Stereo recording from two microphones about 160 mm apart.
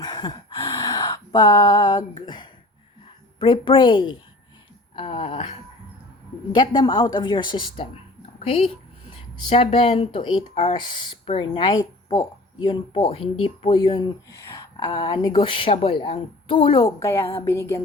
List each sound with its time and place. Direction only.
0.0 s gasp: 25° left (ahead or behind)
2.2 s a woman's voice: 25° left (ahead or behind)
16.8 s a woman's voice: 20° left (ahead or behind)